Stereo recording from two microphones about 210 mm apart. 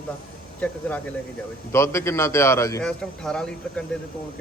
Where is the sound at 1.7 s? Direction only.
15° left (ahead or behind).